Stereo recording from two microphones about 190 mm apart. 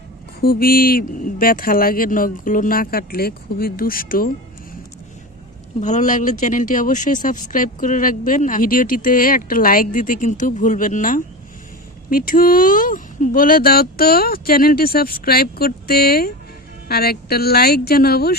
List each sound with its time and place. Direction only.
0.4 s speech: 50° left (ahead or behind)
5.8 s speech: 40° left (ahead or behind); by 18.3 s 55° left (ahead or behind)